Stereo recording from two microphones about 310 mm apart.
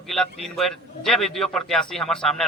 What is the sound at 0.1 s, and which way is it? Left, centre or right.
A man's voice, centre.